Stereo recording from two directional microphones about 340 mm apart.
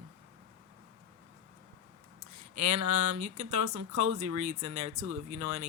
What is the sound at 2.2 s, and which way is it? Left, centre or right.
Speech, right.